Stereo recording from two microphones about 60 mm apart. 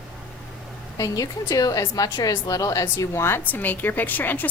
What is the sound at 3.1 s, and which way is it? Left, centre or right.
A woman's voice, left.